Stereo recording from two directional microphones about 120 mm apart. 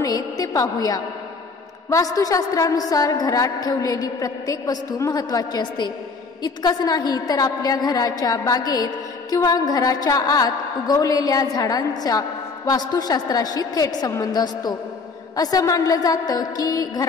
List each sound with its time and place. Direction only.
0.0 s a woman's voice: 30° left (ahead or behind)